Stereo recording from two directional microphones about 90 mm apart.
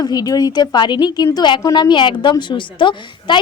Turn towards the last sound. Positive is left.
turn(degrees=65)  # may be behind; listen again after turning